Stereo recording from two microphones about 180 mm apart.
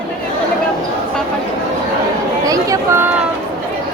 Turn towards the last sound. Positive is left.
turn(degrees=-15)  # may be behind; listen again after turning